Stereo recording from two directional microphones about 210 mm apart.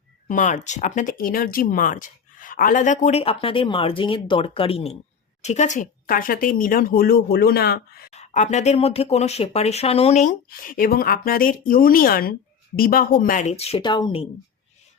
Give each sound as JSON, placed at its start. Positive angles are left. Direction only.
{"t": 0.3, "sound": "speech", "side_deg": 40}
{"t": 8.1, "sound": "speech", "side_deg": 35}